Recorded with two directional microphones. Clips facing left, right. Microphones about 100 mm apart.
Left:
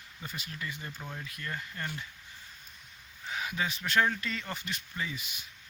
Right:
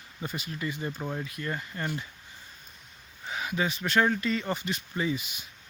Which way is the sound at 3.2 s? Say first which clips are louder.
Right 4 dB; 5° right (ahead or behind).